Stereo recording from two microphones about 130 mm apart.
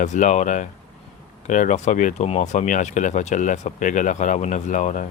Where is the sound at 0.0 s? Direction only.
65° left (ahead or behind).